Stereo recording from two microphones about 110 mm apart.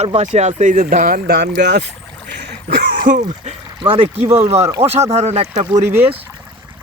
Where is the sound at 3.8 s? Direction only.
55° right (ahead or behind).